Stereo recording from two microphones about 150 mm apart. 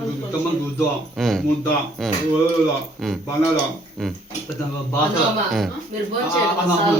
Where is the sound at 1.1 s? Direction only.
Centre (ahead or behind).